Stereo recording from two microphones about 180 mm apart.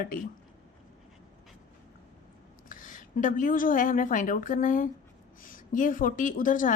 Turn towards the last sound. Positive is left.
turn(degrees=45)  # may be behind; listen again after turning